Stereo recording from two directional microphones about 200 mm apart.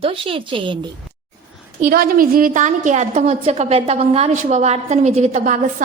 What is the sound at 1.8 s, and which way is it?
A woman's voice, 45° right (ahead or behind).